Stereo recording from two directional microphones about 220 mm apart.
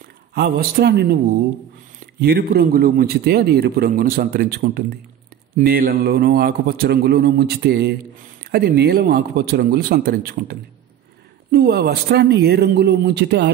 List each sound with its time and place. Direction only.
0.3 s a man's voice: 40° right (ahead or behind)